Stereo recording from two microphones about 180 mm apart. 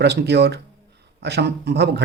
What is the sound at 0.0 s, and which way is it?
Speech, 70° right (ahead or behind).